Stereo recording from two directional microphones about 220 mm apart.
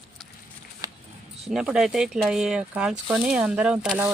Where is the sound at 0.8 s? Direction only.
15° right (ahead or behind).